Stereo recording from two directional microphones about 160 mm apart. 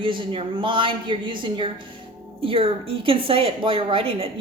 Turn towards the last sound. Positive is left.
turn(degrees=-35)  # may be behind; listen again after turning